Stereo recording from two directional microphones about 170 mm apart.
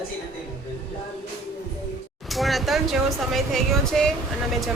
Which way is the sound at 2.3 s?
Centre (ahead or behind).